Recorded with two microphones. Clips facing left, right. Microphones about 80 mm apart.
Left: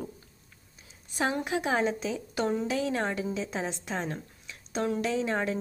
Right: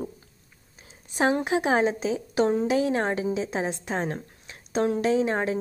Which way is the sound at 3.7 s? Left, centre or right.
Right.